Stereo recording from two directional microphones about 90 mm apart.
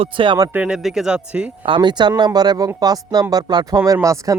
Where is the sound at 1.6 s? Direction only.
60° right (ahead or behind).